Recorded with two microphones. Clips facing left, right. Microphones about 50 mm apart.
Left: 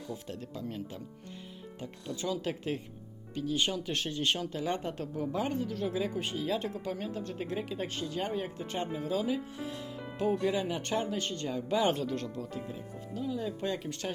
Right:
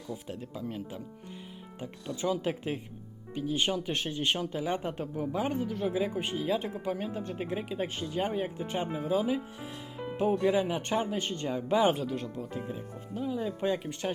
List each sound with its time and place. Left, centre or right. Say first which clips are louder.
0.1 s speech: right 3 dB; centre